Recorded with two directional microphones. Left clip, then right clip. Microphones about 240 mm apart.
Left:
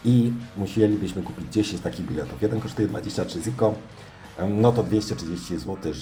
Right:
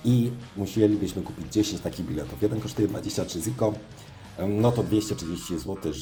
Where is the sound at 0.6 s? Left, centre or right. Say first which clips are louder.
Left 1 dB; right.